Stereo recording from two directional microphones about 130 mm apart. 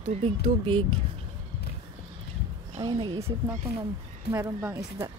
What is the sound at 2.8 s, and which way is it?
Speech, 35° right (ahead or behind).